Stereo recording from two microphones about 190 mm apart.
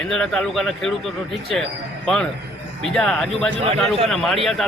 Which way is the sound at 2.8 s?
5° left (ahead or behind).